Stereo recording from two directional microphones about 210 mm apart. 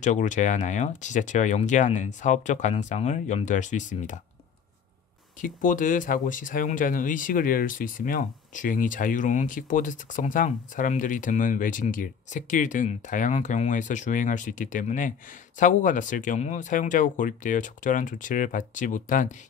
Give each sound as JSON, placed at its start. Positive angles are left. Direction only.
{"t": 0.0, "sound": "speech", "side_deg": 35}
{"t": 5.4, "sound": "speech", "side_deg": 40}